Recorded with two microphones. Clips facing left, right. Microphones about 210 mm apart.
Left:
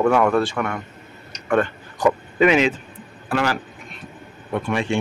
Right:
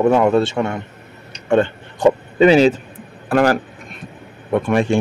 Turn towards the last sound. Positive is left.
turn(degrees=-50)  # may be behind; listen again after turning